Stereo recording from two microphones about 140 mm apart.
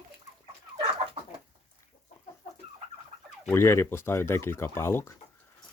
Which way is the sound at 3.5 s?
20° left (ahead or behind).